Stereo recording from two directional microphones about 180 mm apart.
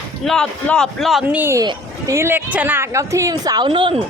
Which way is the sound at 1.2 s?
10° right (ahead or behind).